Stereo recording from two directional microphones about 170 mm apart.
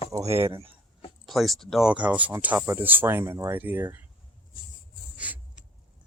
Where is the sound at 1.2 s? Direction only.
Centre (ahead or behind).